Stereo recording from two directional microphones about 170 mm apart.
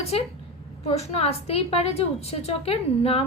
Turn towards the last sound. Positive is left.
turn(degrees=35)  # may be behind; listen again after turning